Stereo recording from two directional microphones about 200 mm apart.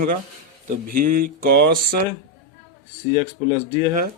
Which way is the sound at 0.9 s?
45° right (ahead or behind).